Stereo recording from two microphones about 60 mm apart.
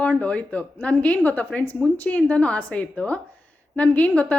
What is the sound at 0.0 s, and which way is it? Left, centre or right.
A woman's voice, centre.